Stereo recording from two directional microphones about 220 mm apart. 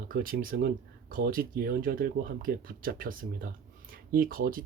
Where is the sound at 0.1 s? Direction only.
40° right (ahead or behind).